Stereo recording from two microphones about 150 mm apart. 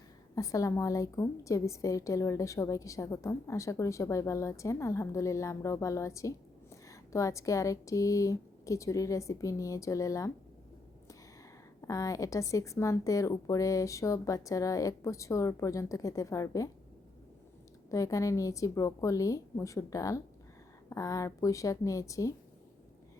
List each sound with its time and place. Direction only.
0.3 s a woman's voice: 20° left (ahead or behind)
11.8 s a woman's voice: 20° left (ahead or behind)
17.9 s a woman's voice: 20° left (ahead or behind)